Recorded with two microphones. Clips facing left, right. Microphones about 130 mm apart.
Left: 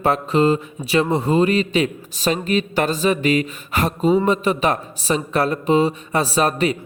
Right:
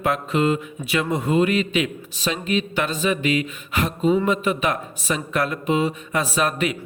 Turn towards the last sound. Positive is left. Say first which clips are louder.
# left 4 dB
turn(degrees=35)  # may be behind; listen again after turning